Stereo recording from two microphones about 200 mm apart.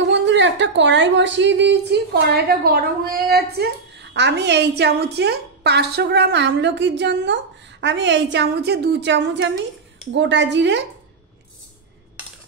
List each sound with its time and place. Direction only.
0.2 s a woman's voice: 60° right (ahead or behind)